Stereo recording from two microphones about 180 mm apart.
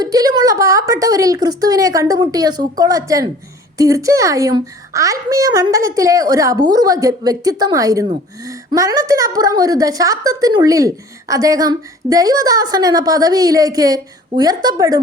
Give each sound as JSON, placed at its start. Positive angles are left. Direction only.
{"t": 0.0, "sound": "a woman's voice", "side_deg": -20}